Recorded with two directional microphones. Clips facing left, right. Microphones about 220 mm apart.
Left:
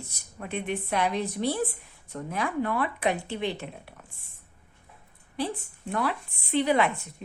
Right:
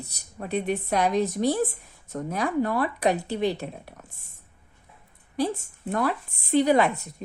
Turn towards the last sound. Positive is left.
turn(degrees=-40)  # may be behind; listen again after turning